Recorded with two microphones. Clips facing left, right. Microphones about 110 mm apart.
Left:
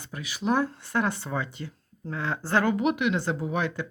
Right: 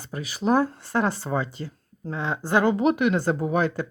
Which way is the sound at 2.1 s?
20° right (ahead or behind).